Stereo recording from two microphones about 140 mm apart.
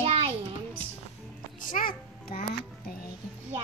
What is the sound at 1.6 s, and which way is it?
Speech, 80° left.